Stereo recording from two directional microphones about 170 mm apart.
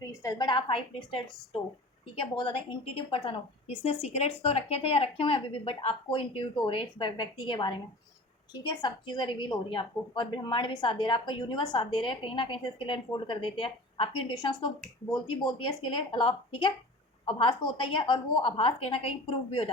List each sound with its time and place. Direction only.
0.0 s a woman's voice: 20° left (ahead or behind); by 19.7 s 35° left (ahead or behind)